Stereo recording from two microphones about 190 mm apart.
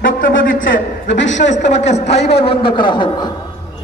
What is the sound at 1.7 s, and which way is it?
A man's voice, 35° left (ahead or behind).